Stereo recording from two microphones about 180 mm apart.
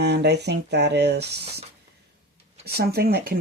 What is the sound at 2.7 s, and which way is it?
Speech, 60° right (ahead or behind).